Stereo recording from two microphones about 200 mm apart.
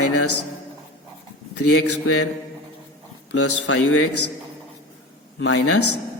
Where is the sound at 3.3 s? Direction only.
90° left.